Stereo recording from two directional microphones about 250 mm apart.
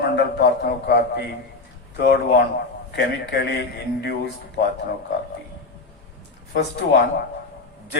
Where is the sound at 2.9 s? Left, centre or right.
Left.